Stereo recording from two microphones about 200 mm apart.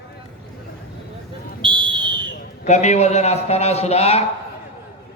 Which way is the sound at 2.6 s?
35° left (ahead or behind).